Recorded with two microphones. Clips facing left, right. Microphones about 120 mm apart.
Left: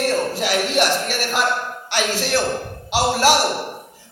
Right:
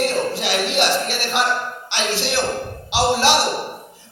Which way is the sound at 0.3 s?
45° left (ahead or behind).